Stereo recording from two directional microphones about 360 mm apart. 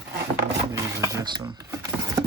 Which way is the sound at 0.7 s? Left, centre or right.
Centre.